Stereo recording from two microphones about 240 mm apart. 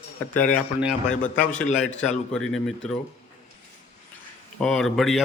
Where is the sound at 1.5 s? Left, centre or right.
Left.